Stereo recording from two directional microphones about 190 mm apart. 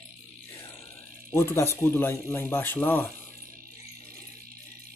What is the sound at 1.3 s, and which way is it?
Speech, 10° left (ahead or behind).